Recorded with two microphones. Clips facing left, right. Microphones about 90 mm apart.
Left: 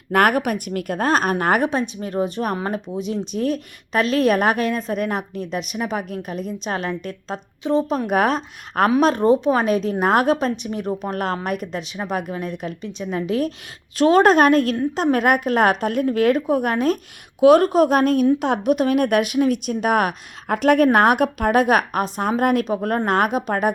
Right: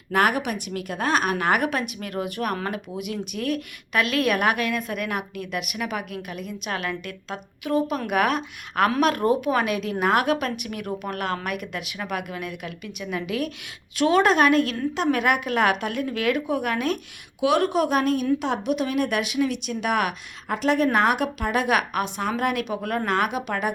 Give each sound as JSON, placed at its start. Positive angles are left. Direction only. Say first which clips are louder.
{"t": 0.1, "sound": "speech", "louder": "left 4 dB", "side_deg": 50}
{"t": 2.0, "sound": "a woman's voice", "louder": "left 5 dB", "side_deg": 30}